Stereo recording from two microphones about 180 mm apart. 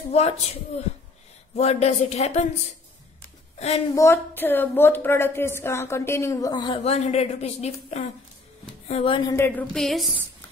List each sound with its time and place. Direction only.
0.1 s speech: 35° left (ahead or behind)
1.5 s speech: 35° left (ahead or behind)
3.5 s a woman's voice: 35° left (ahead or behind)
3.9 s a woman's voice: 15° left (ahead or behind); by 9.2 s 35° left (ahead or behind)
9.3 s a woman's voice: 10° left (ahead or behind)